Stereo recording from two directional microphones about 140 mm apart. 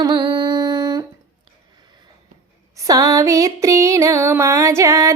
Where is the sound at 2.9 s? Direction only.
25° right (ahead or behind).